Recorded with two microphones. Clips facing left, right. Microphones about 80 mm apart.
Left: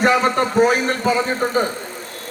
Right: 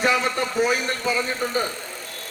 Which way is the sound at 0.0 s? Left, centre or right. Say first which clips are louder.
Left 6 dB; left.